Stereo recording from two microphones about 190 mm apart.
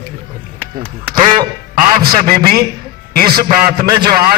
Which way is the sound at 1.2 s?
25° right (ahead or behind).